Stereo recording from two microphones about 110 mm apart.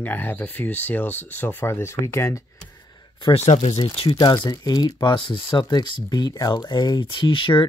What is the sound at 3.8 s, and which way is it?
Speech, 65° left (ahead or behind).